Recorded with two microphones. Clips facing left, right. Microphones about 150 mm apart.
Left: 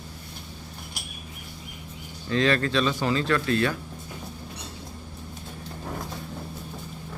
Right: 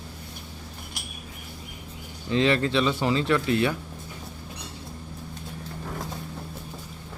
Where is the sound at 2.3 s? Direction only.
20° right (ahead or behind).